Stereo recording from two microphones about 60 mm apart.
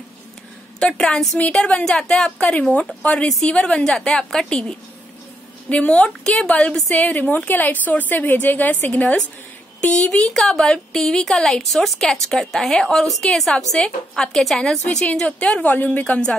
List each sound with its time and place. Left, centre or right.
0.7 s a woman's voice: centre
15.6 s a woman's voice: left